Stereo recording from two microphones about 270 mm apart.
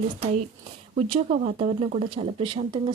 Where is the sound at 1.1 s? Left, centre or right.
Right.